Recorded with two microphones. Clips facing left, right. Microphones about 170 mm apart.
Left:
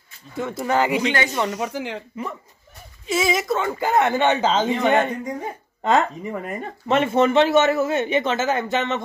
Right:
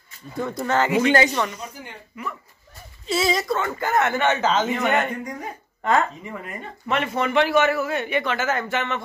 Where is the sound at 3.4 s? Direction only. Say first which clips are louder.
Left 2 dB; 20° left (ahead or behind).